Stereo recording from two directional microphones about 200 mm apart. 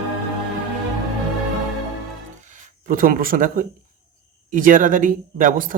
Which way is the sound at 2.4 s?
40° right (ahead or behind).